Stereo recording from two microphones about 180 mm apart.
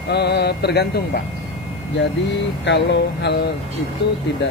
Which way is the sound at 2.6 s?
75° left (ahead or behind).